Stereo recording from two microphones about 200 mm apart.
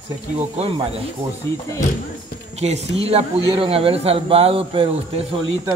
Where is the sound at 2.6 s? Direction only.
30° right (ahead or behind).